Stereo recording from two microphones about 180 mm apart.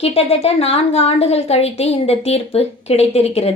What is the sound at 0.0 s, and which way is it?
A woman's voice, 35° left (ahead or behind).